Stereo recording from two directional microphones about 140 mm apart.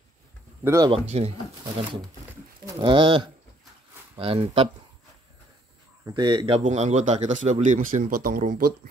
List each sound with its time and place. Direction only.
0.8 s speech: 45° right (ahead or behind)
6.0 s speech: 30° right (ahead or behind)
6.6 s speech: 55° right (ahead or behind); by 8.7 s 85° right